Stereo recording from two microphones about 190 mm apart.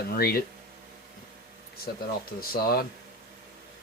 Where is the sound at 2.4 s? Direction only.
50° left (ahead or behind).